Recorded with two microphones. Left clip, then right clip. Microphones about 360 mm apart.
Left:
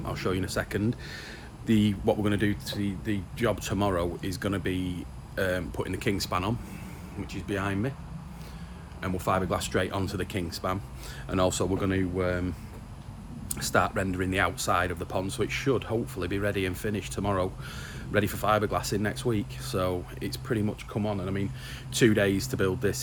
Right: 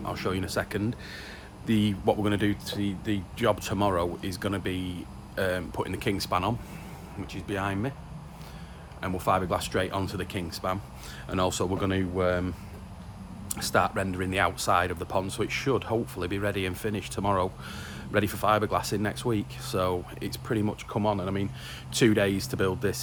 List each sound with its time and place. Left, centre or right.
0.0 s speech: centre
9.0 s speech: centre
13.5 s speech: centre